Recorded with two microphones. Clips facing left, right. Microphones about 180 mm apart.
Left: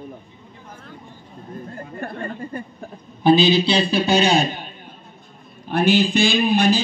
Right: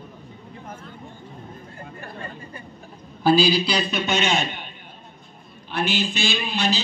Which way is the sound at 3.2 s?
20° left (ahead or behind).